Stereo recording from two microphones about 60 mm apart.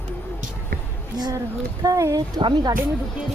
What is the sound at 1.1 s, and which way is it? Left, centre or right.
Speech, right.